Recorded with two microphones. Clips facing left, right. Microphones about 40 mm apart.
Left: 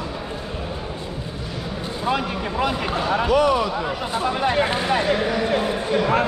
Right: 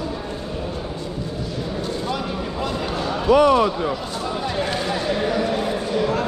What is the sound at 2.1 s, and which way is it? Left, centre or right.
Speech, left.